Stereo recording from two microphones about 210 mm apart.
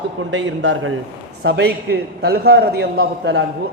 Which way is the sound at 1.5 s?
50° right (ahead or behind).